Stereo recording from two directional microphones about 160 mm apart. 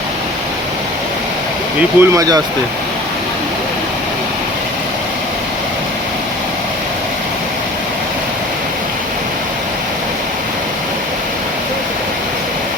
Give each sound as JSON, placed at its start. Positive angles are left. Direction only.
{"t": 2.0, "sound": "speech", "side_deg": -20}